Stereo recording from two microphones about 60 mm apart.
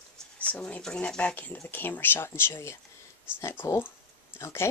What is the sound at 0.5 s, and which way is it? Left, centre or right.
Speech, centre.